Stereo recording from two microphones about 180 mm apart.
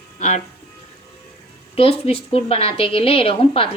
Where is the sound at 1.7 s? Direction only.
35° left (ahead or behind).